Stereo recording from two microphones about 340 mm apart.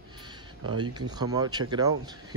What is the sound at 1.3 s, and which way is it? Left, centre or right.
Speech, centre.